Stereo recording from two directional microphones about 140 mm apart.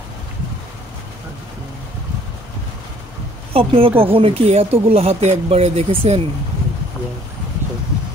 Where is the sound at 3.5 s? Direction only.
40° right (ahead or behind).